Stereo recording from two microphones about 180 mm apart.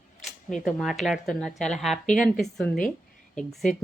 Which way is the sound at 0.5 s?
Centre (ahead or behind).